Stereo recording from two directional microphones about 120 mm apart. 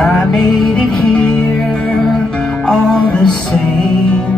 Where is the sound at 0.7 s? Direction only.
10° left (ahead or behind).